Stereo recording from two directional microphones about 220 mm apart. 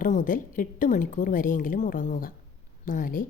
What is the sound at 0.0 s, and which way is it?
Speech, 40° left (ahead or behind).